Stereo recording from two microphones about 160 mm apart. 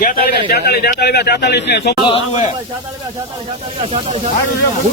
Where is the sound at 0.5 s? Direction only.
75° left (ahead or behind).